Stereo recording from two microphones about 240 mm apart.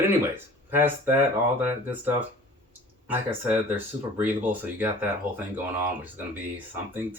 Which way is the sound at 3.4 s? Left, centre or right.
Centre.